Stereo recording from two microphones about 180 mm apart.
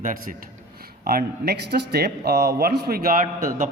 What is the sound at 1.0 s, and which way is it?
Speech, 60° right (ahead or behind).